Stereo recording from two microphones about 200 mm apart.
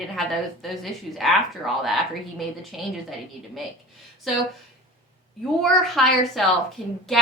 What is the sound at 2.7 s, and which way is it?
Speech, centre (ahead or behind).